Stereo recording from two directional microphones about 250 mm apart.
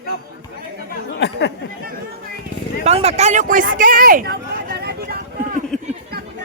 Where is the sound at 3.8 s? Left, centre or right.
Right.